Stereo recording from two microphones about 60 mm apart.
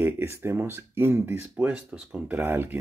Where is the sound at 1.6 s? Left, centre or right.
Right.